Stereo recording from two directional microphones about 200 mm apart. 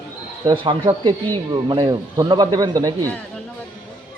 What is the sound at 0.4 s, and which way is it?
Speech, 25° right (ahead or behind).